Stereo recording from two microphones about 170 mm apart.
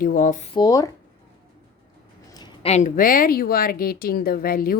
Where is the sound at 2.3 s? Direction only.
25° left (ahead or behind).